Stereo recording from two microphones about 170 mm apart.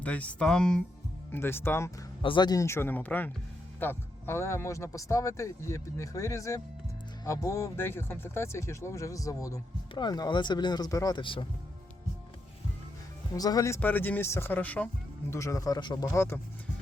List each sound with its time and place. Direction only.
0.0 s a man's voice: 10° left (ahead or behind)
2.2 s a man's voice: 25° left (ahead or behind)
13.3 s a man's voice: 20° left (ahead or behind)